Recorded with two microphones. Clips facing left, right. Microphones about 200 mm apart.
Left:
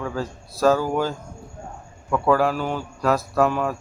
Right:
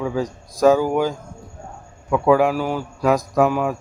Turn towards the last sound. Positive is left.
turn(degrees=-10)  # may be behind; listen again after turning